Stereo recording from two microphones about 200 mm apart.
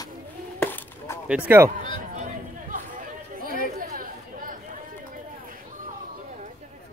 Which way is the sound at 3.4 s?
45° right (ahead or behind).